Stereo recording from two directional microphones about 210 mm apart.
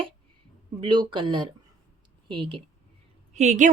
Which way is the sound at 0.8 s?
20° right (ahead or behind).